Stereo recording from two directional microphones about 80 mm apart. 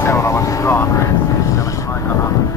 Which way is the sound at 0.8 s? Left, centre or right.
Left.